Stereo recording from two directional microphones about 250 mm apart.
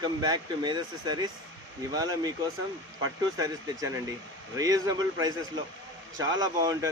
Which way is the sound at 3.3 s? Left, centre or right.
Centre.